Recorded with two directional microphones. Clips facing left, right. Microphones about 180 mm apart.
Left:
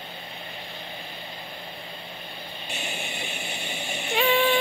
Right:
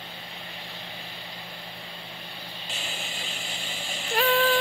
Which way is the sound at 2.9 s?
65° left (ahead or behind).